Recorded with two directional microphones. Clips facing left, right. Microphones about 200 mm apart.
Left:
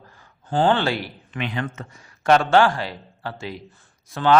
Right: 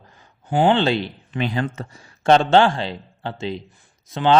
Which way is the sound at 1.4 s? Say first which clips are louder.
Right 4 dB; 35° right (ahead or behind).